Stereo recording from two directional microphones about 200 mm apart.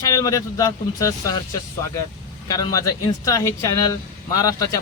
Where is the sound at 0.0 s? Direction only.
15° left (ahead or behind).